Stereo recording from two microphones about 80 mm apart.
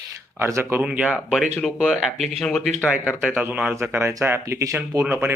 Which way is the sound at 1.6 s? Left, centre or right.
Centre.